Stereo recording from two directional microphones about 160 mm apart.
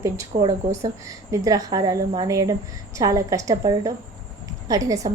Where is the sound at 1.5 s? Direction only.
20° right (ahead or behind).